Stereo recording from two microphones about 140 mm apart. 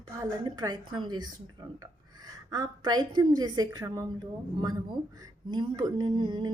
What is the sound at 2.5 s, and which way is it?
Speech, 30° right (ahead or behind).